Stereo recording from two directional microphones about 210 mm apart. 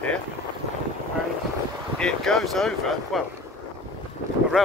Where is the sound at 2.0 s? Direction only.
Centre (ahead or behind).